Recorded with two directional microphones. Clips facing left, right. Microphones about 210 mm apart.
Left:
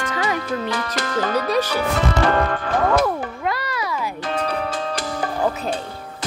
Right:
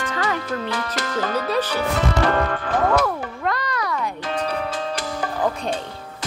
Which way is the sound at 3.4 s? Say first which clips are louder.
Right 2 dB; 5° left (ahead or behind).